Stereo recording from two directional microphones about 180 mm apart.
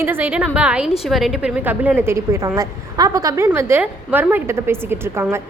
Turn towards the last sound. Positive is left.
turn(degrees=-15)  # may be behind; listen again after turning